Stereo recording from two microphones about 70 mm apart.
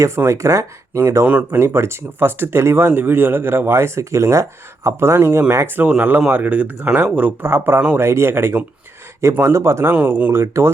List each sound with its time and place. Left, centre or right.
0.3 s speech: right
5.8 s speech: right
7.5 s speech: right
9.8 s speech: right
10.3 s speech: right